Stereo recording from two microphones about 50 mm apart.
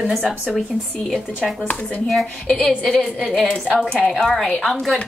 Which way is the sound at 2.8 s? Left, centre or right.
Centre.